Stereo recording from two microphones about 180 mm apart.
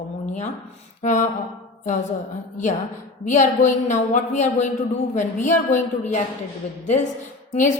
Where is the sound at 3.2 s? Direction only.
45° left (ahead or behind).